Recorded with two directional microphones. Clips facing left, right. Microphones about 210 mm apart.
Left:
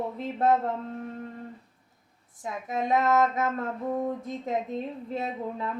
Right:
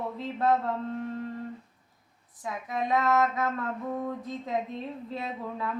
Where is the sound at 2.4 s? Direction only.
25° left (ahead or behind).